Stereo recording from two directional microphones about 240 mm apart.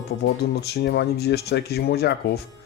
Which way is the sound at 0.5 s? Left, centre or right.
Left.